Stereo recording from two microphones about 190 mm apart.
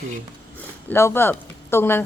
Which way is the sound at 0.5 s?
10° left (ahead or behind).